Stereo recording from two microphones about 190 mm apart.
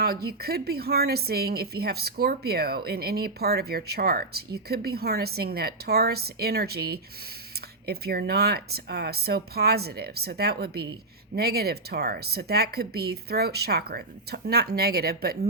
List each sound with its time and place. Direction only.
0.0 s speech: 55° right (ahead or behind)